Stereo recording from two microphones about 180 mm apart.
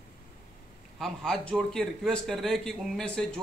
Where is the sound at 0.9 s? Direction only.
5° left (ahead or behind).